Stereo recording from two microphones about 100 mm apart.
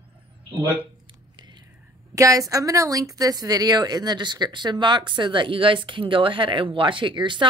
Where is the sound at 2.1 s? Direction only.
35° right (ahead or behind).